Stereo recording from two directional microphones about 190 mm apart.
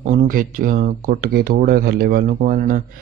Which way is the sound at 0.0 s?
40° right (ahead or behind).